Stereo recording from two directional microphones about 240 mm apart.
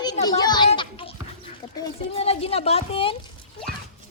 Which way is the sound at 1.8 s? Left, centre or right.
Left.